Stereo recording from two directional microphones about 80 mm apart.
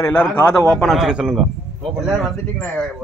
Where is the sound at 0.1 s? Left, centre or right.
Centre.